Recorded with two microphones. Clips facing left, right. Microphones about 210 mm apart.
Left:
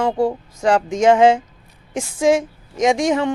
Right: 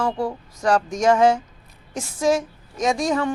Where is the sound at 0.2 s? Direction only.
25° left (ahead or behind).